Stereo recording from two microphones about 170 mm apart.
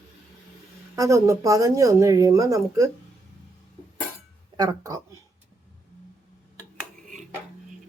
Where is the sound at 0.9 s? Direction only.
20° right (ahead or behind).